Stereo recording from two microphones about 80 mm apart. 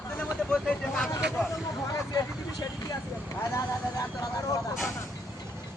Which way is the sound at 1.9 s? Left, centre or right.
Left.